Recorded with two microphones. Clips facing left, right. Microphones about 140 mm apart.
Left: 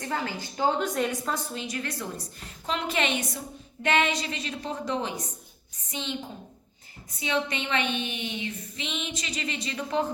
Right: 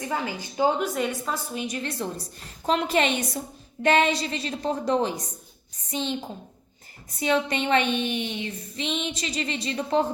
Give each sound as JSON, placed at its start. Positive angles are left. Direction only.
{"t": 0.0, "sound": "a woman's voice", "side_deg": -15}
{"t": 0.9, "sound": "a woman's voice", "side_deg": 0}
{"t": 1.5, "sound": "a woman's voice", "side_deg": -20}
{"t": 2.6, "sound": "female singing", "side_deg": -40}
{"t": 7.2, "sound": "female singing", "side_deg": -40}